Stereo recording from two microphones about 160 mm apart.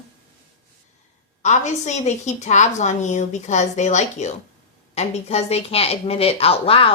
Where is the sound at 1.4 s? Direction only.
45° left (ahead or behind).